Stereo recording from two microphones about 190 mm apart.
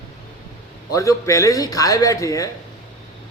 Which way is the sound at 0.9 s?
15° left (ahead or behind).